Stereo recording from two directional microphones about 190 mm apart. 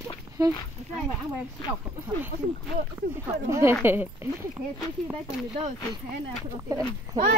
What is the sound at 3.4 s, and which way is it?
Speech, 15° right (ahead or behind).